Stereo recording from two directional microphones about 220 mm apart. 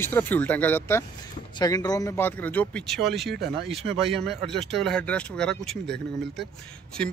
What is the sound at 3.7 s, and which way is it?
Speech, 25° right (ahead or behind).